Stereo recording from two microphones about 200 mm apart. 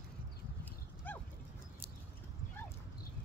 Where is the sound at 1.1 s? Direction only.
10° left (ahead or behind).